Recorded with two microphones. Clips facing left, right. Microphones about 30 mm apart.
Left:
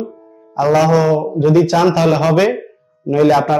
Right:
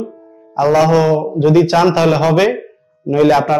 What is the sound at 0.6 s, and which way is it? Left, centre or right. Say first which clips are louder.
Speech: right 1 dB; right.